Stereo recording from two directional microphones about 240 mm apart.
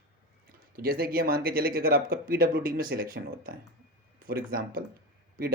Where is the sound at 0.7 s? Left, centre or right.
Right.